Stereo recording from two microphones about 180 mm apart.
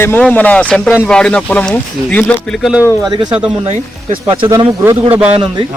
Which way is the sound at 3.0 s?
25° right (ahead or behind).